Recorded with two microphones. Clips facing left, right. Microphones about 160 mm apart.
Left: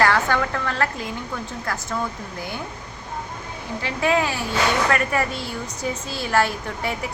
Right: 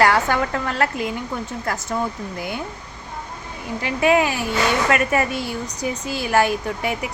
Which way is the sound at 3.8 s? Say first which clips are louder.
Right 4 dB; 15° right (ahead or behind).